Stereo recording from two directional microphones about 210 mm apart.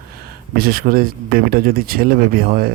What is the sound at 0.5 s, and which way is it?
Speech, 45° right (ahead or behind).